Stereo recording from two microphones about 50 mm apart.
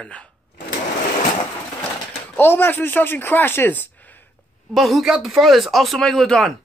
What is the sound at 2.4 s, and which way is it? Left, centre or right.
A man's voice, left.